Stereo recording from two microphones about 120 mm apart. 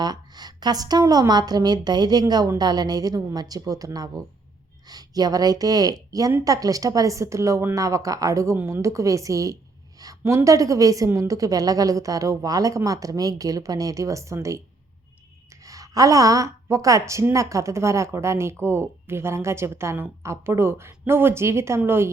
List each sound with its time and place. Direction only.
0.0 s a woman's voice: 35° right (ahead or behind)